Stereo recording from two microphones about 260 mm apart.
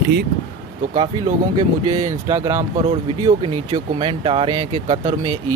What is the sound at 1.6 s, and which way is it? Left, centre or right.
Speech, centre.